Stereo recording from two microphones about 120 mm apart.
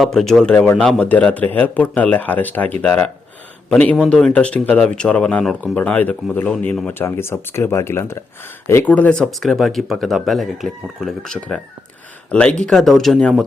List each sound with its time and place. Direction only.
0.0 s speech: 5° left (ahead or behind)